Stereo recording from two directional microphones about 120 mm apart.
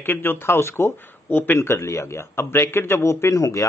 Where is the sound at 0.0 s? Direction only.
15° left (ahead or behind).